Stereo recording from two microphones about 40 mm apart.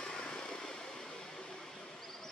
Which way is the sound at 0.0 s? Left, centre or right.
Left.